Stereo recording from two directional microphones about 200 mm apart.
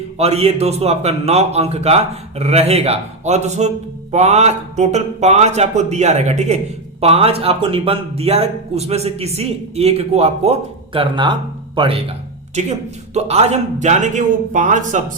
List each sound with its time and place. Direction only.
0.2 s a man's voice: 30° right (ahead or behind)
13.1 s a man's voice: 35° right (ahead or behind)